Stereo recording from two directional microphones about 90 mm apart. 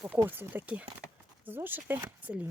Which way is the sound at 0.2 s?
20° right (ahead or behind).